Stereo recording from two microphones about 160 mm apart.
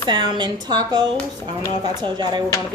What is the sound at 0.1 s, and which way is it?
A woman's voice, 30° right (ahead or behind).